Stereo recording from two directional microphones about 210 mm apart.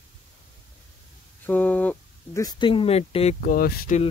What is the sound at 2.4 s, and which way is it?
Speech, 25° left (ahead or behind).